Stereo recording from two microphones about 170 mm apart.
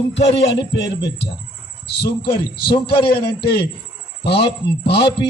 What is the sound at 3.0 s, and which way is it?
Speech, 70° left (ahead or behind).